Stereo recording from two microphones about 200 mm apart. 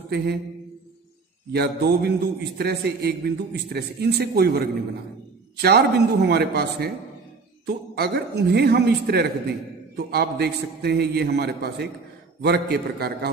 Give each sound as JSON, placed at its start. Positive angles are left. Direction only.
{"t": 1.5, "sound": "a man's voice", "side_deg": -55}